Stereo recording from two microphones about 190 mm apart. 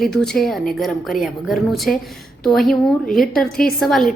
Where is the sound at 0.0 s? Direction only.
Centre (ahead or behind).